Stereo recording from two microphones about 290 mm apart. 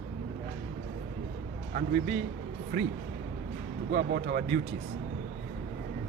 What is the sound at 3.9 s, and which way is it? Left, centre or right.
Speech, right.